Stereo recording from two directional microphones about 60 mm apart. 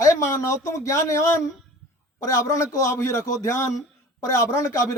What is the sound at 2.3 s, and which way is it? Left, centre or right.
A man's voice, left.